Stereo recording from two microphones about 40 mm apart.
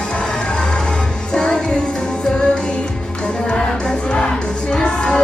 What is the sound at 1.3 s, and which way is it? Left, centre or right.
Music, centre.